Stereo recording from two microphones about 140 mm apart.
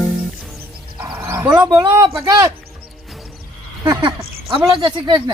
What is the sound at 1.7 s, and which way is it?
Speech, 30° right (ahead or behind).